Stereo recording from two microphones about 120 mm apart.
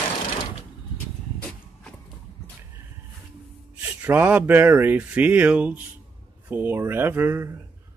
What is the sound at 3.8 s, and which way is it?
A man's voice, 15° right (ahead or behind).